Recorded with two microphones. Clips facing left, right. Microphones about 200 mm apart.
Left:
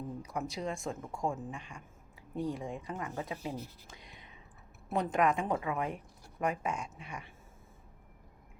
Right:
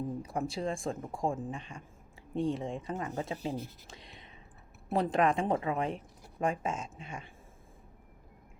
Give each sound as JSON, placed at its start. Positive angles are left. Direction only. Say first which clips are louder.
{"t": 0.2, "sound": "speech", "louder": "right 3 dB", "side_deg": -30}